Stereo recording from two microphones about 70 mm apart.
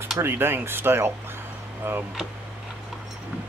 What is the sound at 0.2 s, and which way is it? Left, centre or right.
Speech, right.